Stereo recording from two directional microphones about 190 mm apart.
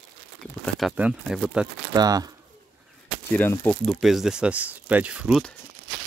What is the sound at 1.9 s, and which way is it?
Speech, 20° right (ahead or behind).